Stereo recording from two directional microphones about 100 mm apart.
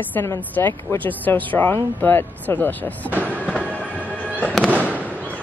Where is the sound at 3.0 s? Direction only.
15° right (ahead or behind).